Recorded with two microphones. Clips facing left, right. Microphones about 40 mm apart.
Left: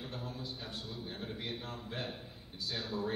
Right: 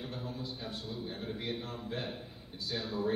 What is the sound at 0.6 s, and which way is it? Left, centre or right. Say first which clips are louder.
A man's voice: right 3 dB; centre.